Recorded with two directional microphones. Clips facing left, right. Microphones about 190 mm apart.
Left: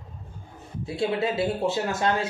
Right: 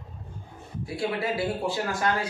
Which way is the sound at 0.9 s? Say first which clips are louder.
Left 3 dB; 25° left (ahead or behind).